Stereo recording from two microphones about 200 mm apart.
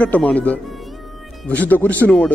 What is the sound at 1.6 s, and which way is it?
Speech, 10° left (ahead or behind).